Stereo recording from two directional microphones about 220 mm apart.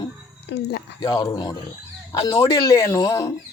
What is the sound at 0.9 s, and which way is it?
A man's voice, 15° left (ahead or behind).